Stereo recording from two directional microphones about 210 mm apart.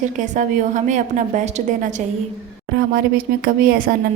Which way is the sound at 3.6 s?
40° right (ahead or behind).